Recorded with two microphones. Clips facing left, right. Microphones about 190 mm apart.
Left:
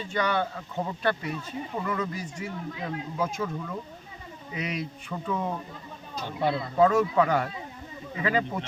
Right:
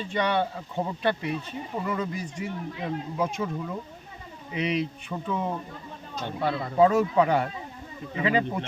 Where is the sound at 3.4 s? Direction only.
10° right (ahead or behind).